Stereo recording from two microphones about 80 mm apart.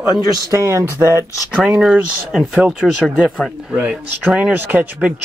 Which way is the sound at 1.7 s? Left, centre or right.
Centre.